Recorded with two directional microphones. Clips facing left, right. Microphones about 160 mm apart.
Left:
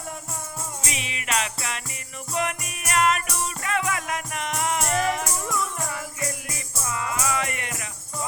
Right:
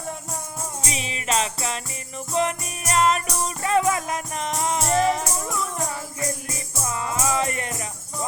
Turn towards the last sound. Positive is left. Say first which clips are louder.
# right 4 dB
turn(degrees=-35)  # may be behind; listen again after turning